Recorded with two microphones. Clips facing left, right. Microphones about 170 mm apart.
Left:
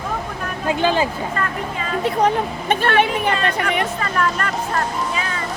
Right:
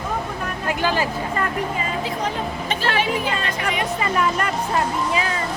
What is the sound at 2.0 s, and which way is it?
A woman's voice, 60° left (ahead or behind).